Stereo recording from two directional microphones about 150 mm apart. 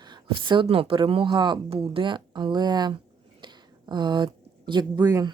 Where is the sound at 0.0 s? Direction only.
30° right (ahead or behind).